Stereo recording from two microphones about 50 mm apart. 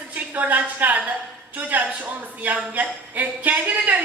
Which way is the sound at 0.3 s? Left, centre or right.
Right.